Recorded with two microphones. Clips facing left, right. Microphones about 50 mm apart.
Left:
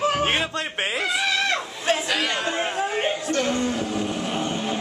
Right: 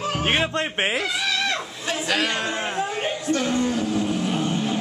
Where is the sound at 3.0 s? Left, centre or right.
Left.